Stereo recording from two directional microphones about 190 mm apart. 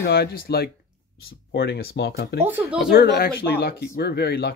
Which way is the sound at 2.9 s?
55° left (ahead or behind).